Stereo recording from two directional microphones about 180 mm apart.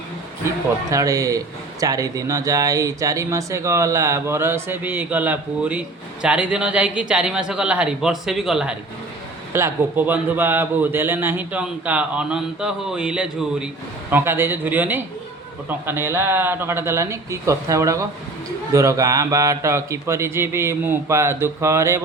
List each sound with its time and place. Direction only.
0.9 s a man's voice: 20° right (ahead or behind); by 8.7 s centre (ahead or behind)
9.5 s a man's voice: 15° right (ahead or behind)